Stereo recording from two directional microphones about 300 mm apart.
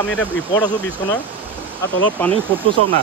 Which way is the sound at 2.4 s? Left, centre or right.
Centre.